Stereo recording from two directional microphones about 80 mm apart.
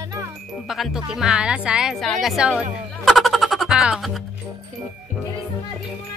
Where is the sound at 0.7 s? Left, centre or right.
Centre.